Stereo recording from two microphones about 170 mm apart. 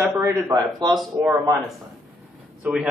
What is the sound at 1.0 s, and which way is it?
Speech, 10° right (ahead or behind).